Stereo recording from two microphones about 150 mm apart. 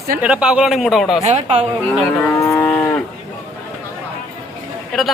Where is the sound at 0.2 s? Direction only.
5° right (ahead or behind).